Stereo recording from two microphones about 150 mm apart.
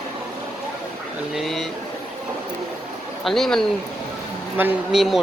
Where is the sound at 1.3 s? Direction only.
Centre (ahead or behind).